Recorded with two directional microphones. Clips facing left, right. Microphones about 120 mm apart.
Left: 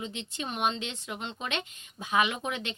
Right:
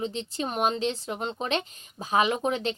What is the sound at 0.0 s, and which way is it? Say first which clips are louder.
Speech: right 6 dB; 35° right (ahead or behind).